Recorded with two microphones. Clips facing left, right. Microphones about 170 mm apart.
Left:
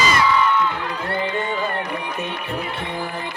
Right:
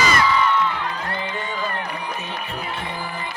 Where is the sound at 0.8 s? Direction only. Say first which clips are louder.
Left 3 dB; 55° left (ahead or behind).